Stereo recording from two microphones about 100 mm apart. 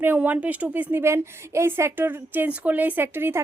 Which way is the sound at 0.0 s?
15° right (ahead or behind).